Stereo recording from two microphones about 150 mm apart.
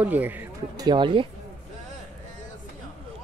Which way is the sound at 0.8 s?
30° right (ahead or behind).